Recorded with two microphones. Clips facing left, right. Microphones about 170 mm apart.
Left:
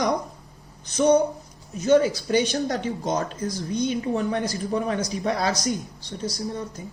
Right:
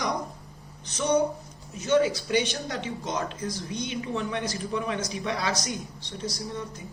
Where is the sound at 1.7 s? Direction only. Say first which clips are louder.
Left 4 dB; 40° left (ahead or behind).